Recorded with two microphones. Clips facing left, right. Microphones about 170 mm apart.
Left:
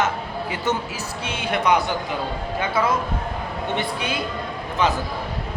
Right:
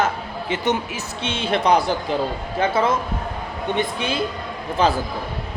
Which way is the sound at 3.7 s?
25° right (ahead or behind).